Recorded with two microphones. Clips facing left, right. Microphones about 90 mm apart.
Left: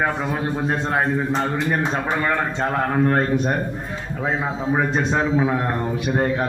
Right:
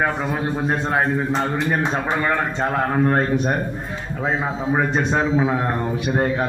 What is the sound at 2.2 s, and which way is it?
A man's voice, 10° right (ahead or behind).